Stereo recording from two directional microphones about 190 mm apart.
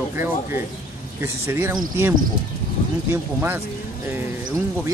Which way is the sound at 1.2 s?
15° right (ahead or behind).